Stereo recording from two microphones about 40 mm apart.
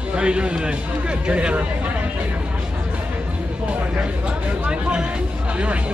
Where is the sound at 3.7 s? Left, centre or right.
Right.